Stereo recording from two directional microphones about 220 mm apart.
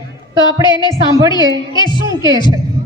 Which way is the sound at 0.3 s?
20° left (ahead or behind).